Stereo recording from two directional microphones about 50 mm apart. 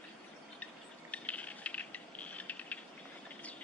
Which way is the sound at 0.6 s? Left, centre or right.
Left.